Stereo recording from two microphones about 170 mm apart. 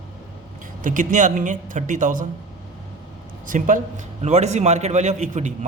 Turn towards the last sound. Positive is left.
turn(degrees=-45)  # may be behind; listen again after turning